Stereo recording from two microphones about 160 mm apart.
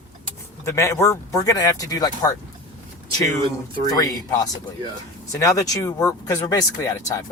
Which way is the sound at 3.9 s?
25° left (ahead or behind).